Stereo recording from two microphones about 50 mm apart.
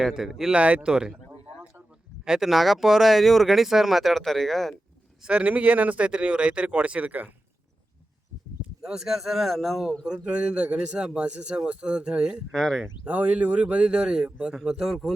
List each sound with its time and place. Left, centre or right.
0.1 s speech: centre
0.5 s speech: right
2.2 s speech: centre
2.5 s speech: centre
5.2 s speech: right
6.1 s speech: right
8.8 s speech: centre
10.1 s speech: right
12.5 s speech: centre
13.1 s speech: right; by 14.9 s centre